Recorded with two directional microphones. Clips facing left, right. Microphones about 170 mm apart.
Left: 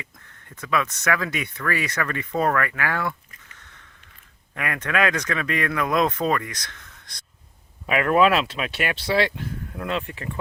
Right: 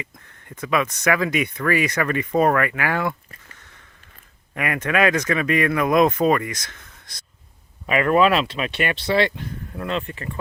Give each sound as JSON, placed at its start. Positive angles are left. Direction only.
{"t": 0.5, "sound": "speech", "side_deg": -15}
{"t": 4.5, "sound": "speech", "side_deg": -10}